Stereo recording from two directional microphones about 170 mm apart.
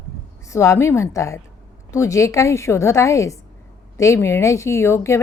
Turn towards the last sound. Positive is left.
turn(degrees=15)  # may be behind; listen again after turning